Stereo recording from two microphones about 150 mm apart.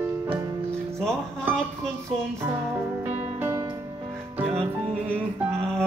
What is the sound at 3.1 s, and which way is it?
Music, 45° right (ahead or behind).